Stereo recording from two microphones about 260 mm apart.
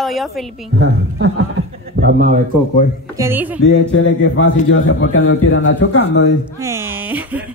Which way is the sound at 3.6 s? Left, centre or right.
Left.